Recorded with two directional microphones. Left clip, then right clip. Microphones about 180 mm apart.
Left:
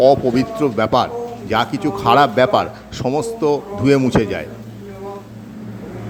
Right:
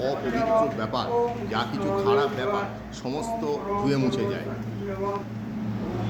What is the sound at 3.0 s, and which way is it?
A man's voice, 35° left (ahead or behind).